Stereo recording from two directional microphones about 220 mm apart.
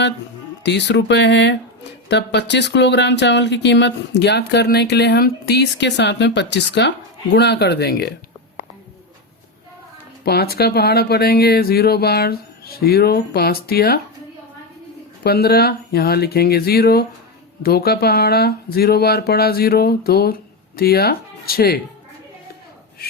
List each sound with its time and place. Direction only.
0.6 s speech: 50° left (ahead or behind)
10.2 s speech: 45° left (ahead or behind)
15.2 s speech: 45° left (ahead or behind)